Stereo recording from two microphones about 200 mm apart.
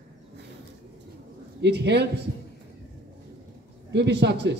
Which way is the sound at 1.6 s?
60° right (ahead or behind).